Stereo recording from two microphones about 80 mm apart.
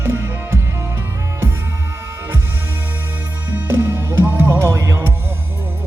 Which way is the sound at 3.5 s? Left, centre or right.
Right.